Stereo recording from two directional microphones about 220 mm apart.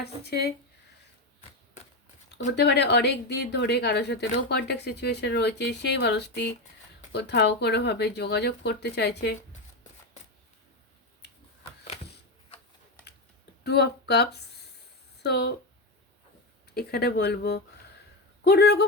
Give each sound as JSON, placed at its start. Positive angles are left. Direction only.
{"t": 0.0, "sound": "speech", "side_deg": 45}
{"t": 2.6, "sound": "speech", "side_deg": 50}
{"t": 13.7, "sound": "speech", "side_deg": 50}
{"t": 16.7, "sound": "speech", "side_deg": 45}